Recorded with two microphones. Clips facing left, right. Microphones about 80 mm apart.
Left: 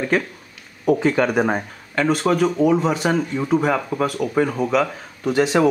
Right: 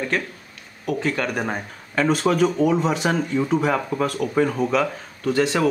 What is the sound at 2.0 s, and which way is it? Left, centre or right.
A man's voice, centre.